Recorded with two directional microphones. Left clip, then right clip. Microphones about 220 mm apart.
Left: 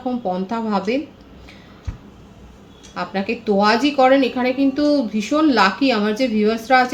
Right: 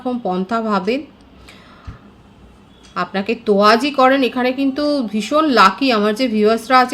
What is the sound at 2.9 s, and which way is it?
A woman's voice, 50° right (ahead or behind).